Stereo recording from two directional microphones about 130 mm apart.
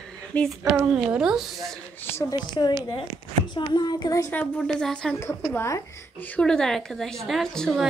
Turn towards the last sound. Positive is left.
turn(degrees=0)  # may be behind; listen again after turning